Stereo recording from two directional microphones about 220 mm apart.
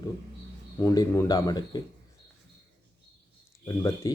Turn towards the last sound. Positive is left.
turn(degrees=15)  # may be behind; listen again after turning